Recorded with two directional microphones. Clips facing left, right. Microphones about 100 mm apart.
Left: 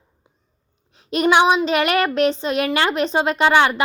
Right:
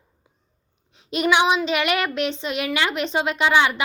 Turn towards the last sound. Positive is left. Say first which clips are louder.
# left 3 dB
turn(degrees=45)  # may be behind; listen again after turning